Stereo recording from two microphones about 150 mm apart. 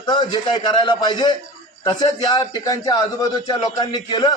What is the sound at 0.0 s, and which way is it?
A man's voice, 30° left (ahead or behind).